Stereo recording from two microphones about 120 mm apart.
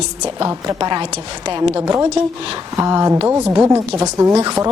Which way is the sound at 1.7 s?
20° right (ahead or behind).